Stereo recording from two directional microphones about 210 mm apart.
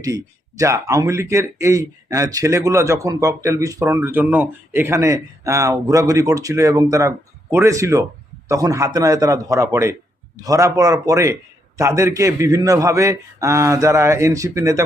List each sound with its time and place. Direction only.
0.0 s speech: 15° right (ahead or behind)